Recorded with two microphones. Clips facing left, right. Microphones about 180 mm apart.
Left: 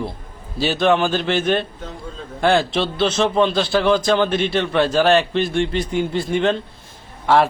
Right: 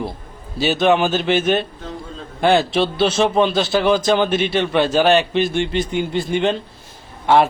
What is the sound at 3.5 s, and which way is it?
Speech, 25° right (ahead or behind).